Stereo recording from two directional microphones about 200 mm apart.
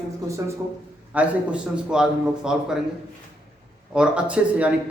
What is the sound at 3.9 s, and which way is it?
Speech, 5° right (ahead or behind).